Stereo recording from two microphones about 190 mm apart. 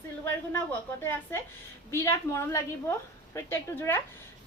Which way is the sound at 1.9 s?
15° left (ahead or behind).